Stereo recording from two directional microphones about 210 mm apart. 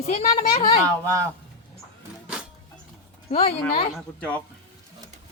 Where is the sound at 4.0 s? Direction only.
5° left (ahead or behind).